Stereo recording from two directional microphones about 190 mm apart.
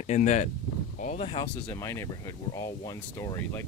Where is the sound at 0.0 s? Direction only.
40° left (ahead or behind).